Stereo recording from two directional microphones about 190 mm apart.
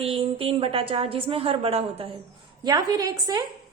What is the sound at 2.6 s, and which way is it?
Speech, 20° right (ahead or behind).